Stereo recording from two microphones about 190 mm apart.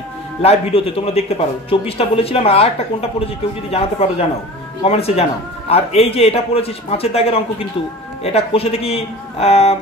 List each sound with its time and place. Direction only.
0.4 s speech: 30° left (ahead or behind)